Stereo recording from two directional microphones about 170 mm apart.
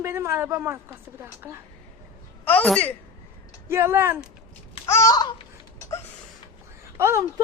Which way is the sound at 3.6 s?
15° right (ahead or behind).